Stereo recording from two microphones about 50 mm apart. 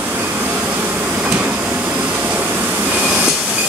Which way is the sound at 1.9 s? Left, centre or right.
Right.